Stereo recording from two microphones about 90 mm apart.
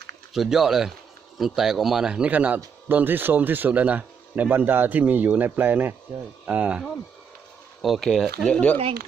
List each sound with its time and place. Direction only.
0.3 s a man's voice: 5° right (ahead or behind)
7.8 s speech: centre (ahead or behind)
8.5 s speech: 15° left (ahead or behind)